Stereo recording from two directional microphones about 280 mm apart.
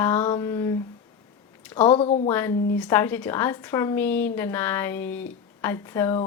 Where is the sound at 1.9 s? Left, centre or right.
Left.